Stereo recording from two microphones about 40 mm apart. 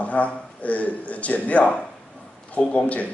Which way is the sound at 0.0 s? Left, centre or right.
Left.